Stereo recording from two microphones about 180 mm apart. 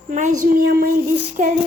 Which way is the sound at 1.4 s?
45° right (ahead or behind).